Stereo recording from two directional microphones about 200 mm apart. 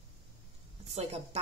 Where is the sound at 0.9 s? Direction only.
30° right (ahead or behind).